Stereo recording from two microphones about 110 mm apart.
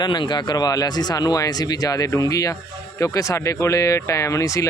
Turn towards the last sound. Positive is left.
turn(degrees=30)  # may be behind; listen again after turning